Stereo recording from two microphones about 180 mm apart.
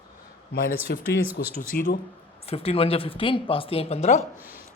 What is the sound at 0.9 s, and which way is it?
Speech, 70° left (ahead or behind).